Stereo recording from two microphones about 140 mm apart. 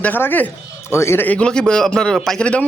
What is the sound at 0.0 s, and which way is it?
Speech, 15° left (ahead or behind).